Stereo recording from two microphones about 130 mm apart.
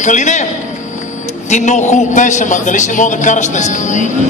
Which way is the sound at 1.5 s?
65° left (ahead or behind).